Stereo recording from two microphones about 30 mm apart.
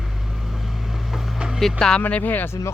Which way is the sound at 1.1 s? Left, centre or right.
Centre.